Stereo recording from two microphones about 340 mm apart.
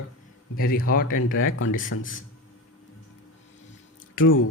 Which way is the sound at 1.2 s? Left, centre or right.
Left.